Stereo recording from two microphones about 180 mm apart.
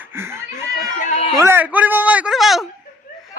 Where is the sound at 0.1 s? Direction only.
15° right (ahead or behind).